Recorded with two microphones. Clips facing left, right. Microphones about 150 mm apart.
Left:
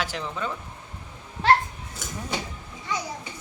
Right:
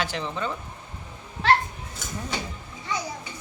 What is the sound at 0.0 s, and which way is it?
Speech, centre (ahead or behind).